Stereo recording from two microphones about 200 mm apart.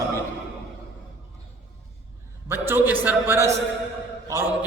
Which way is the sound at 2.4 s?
10° right (ahead or behind).